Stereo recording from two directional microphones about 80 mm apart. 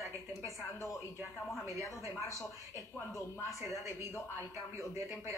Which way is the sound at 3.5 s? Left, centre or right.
Left.